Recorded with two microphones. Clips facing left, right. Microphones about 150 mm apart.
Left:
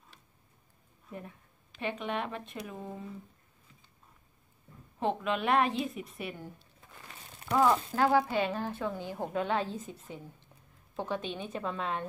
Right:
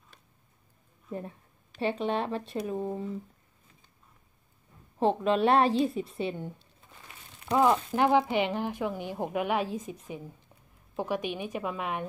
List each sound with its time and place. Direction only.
1.1 s speech: 35° right (ahead or behind)
4.9 s a woman's voice: 35° right (ahead or behind); by 12.1 s 15° right (ahead or behind)